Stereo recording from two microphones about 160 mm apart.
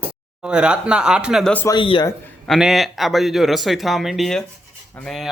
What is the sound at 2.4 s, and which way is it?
Speech, centre (ahead or behind).